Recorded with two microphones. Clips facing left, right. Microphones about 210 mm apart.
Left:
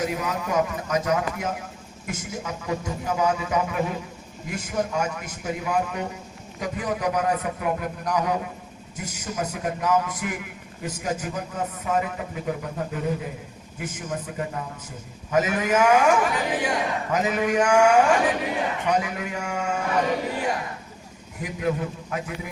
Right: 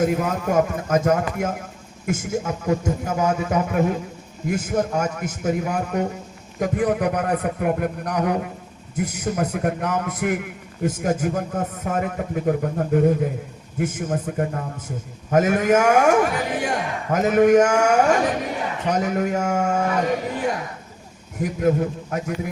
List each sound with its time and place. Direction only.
0.0 s a man's voice: 50° right (ahead or behind)
21.3 s a man's voice: 45° right (ahead or behind)